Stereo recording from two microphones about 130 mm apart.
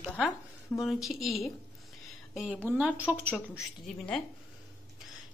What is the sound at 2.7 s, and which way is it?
Speech, 10° right (ahead or behind).